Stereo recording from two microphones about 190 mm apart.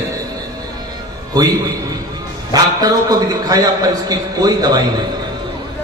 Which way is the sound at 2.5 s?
20° right (ahead or behind).